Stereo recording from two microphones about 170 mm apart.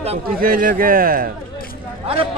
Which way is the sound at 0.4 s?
55° right (ahead or behind).